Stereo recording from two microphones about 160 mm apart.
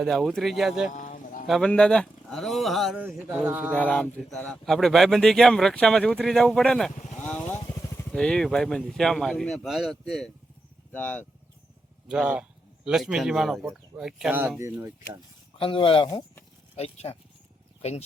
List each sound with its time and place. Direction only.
0.0 s speech: centre (ahead or behind)
0.9 s a sound: 55° left (ahead or behind)
1.5 s speech: 5° left (ahead or behind)
3.0 s speech: 10° right (ahead or behind)
3.8 s speech: 10° left (ahead or behind)
7.3 s motorcycle: 10° left (ahead or behind)
8.1 s speech: 5° left (ahead or behind)
10.9 s speech: 10° left (ahead or behind)
12.0 s a man's voice: 5° right (ahead or behind)
15.5 s speech: 35° left (ahead or behind)